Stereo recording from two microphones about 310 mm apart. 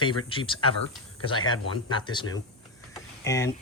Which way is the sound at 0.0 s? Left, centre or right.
Centre.